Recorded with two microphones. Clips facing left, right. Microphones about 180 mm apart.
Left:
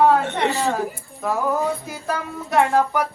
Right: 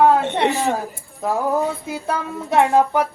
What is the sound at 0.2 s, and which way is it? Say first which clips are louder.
Speech: right 2 dB; 20° right (ahead or behind).